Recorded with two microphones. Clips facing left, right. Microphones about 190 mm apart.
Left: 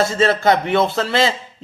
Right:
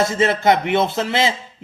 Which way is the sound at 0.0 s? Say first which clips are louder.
Left 1 dB; 20° right (ahead or behind).